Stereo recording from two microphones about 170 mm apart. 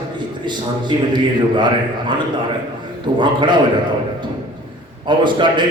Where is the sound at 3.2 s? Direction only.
25° right (ahead or behind).